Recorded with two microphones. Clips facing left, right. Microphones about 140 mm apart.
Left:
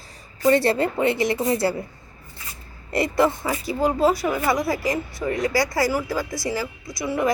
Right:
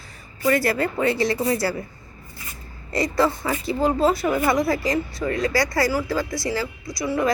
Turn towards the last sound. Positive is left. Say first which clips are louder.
# right 1 dB
turn(degrees=20)  # may be behind; listen again after turning